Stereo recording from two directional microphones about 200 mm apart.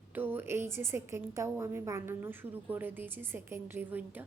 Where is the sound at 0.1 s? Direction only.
10° right (ahead or behind).